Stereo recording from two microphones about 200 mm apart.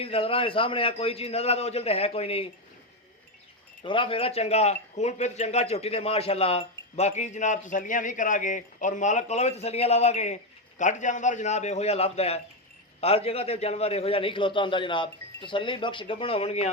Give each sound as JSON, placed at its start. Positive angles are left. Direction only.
{"t": 0.0, "sound": "a man's voice", "side_deg": 30}
{"t": 3.8, "sound": "a man's voice", "side_deg": 25}